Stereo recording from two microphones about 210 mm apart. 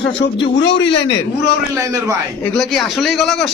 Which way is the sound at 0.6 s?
55° left (ahead or behind).